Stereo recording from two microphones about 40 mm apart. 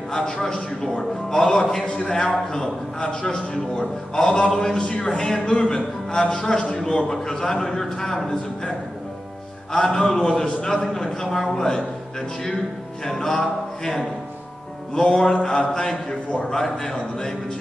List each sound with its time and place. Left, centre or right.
0.1 s a man's voice: centre
4.7 s a man's voice: left
9.7 s a man's voice: centre
13.0 s music: centre
15.0 s a man's voice: centre